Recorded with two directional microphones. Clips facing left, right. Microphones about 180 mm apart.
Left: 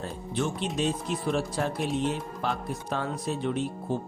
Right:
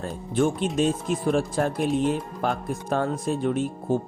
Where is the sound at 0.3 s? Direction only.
50° right (ahead or behind).